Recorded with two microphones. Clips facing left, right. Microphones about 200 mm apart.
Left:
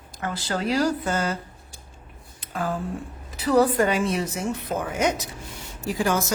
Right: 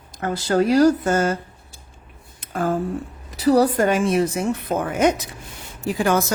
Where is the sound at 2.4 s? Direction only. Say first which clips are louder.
Right 6 dB; 50° right (ahead or behind).